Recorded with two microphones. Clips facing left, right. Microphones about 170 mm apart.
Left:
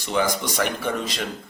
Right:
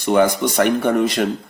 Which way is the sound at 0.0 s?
60° right (ahead or behind).